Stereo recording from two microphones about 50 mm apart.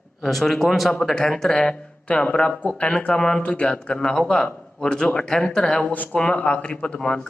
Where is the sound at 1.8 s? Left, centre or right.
Left.